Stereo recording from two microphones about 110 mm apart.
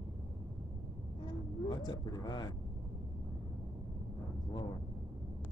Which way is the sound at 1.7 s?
40° left (ahead or behind).